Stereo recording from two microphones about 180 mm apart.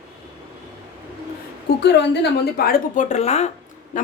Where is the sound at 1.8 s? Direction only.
70° left (ahead or behind).